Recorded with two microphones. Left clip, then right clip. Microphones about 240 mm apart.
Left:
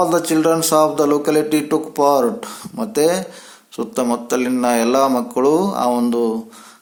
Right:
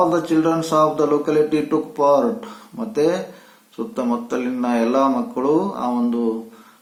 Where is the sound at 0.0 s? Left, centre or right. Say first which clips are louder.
Left 2 dB; left.